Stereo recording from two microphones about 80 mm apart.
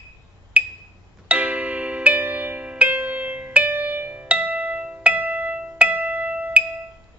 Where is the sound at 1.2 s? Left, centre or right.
Centre.